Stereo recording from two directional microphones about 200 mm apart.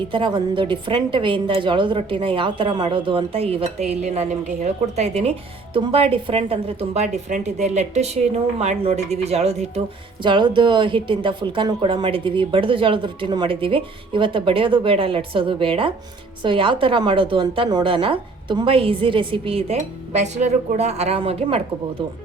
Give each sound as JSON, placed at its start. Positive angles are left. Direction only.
{"t": 0.1, "sound": "a woman's voice", "side_deg": -25}